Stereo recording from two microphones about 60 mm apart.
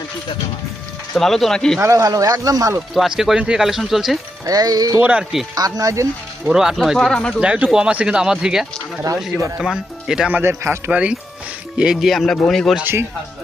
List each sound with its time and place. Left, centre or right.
1.1 s speech: centre
1.8 s speech: right
2.9 s speech: centre
4.4 s speech: right
6.4 s speech: centre
7.1 s speech: centre
7.3 s speech: centre
9.1 s speech: right
9.6 s speech: centre
10.4 s a man's voice: right
10.9 s speech: right
11.8 s speech: centre
12.8 s a man's voice: right